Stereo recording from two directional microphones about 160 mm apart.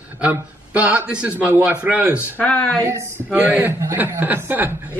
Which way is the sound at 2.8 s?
20° right (ahead or behind).